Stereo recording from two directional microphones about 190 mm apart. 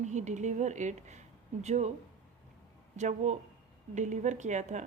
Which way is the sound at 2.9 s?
35° right (ahead or behind).